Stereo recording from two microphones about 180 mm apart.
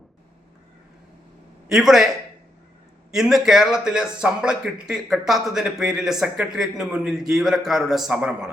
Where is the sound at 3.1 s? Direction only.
5° right (ahead or behind).